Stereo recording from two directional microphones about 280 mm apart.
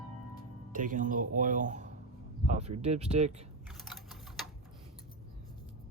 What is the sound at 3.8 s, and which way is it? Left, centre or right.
Typewriter, centre.